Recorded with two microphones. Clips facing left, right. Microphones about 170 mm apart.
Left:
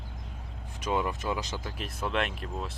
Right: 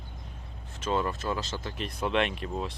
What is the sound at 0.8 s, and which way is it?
Speech, 15° left (ahead or behind).